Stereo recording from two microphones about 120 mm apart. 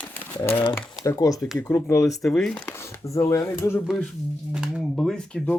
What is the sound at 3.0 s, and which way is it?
Speech, 25° left (ahead or behind).